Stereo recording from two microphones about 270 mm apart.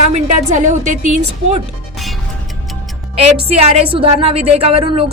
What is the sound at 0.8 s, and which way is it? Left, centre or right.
Speech, right.